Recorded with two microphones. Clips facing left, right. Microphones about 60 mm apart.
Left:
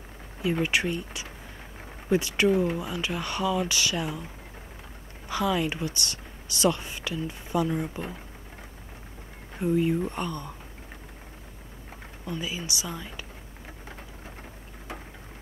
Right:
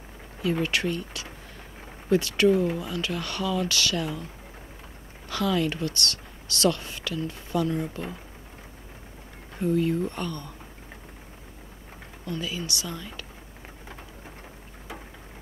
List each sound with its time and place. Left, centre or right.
0.4 s speech: centre
5.3 s speech: centre
9.6 s speech: centre
12.3 s speech: centre